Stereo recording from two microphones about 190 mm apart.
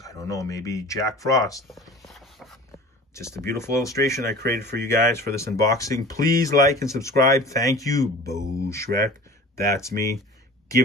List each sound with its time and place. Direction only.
0.0 s speech: 15° left (ahead or behind)
1.7 s a sound: centre (ahead or behind)
3.2 s speech: 15° left (ahead or behind)
4.4 s speech: 60° right (ahead or behind)
4.8 s speech: 15° left (ahead or behind)